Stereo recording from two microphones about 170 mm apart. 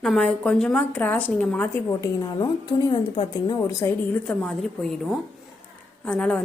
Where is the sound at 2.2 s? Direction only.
25° left (ahead or behind).